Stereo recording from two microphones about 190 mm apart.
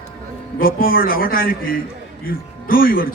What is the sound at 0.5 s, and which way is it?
A man's voice, 50° left (ahead or behind).